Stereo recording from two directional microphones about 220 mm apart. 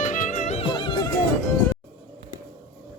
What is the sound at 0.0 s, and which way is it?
Music, 35° left (ahead or behind).